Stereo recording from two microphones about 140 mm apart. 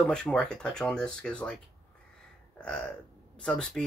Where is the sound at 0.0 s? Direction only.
5° left (ahead or behind).